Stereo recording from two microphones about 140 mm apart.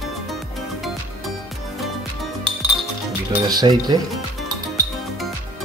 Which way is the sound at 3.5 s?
30° right (ahead or behind).